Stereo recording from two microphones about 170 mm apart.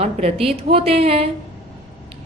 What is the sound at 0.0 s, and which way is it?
A woman's voice, 35° right (ahead or behind).